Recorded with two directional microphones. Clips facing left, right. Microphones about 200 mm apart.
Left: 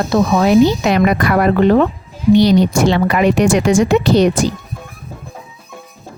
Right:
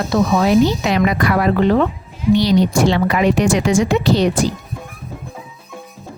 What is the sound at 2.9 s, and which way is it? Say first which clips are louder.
Speech: left 2 dB; 60° left (ahead or behind).